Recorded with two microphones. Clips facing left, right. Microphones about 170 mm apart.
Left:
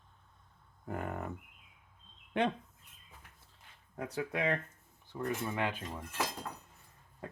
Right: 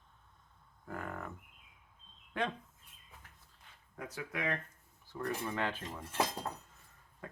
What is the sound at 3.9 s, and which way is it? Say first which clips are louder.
Speech: left 5 dB; 30° left (ahead or behind).